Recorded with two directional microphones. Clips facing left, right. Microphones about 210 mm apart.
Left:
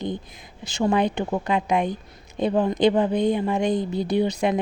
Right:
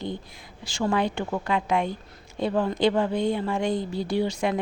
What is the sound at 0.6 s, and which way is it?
A woman's voice, 20° left (ahead or behind).